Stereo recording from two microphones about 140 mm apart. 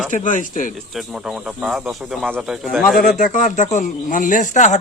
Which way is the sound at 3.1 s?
70° left (ahead or behind).